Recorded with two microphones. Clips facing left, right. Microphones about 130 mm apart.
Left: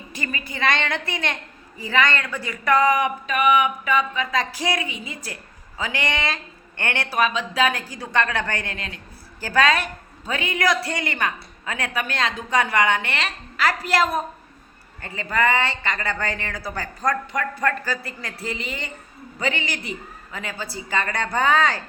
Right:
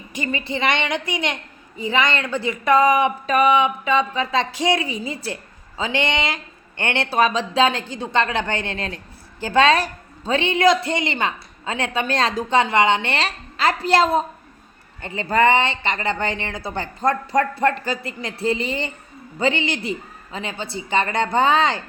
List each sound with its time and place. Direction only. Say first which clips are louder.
0.1 s a woman's voice: right 7 dB; 20° right (ahead or behind)